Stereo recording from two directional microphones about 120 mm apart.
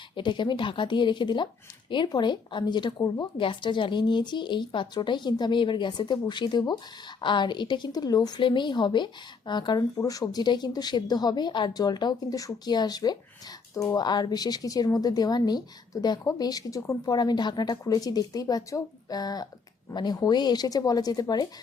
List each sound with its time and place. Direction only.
0.2 s a woman's voice: 40° left (ahead or behind)
8.4 s a woman's voice: 45° left (ahead or behind)